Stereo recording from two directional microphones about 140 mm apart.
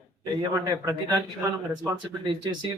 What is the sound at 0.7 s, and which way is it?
Speech, 25° right (ahead or behind).